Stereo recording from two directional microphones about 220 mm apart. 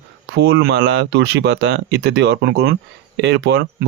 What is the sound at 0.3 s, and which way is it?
Speech, 50° right (ahead or behind).